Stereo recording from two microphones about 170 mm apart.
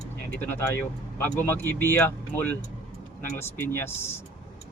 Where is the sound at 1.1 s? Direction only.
15° left (ahead or behind).